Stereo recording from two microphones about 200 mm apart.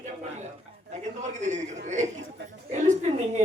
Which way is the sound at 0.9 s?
35° right (ahead or behind).